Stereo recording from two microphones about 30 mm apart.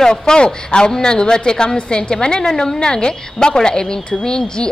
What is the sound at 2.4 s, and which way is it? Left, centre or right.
Speech, centre.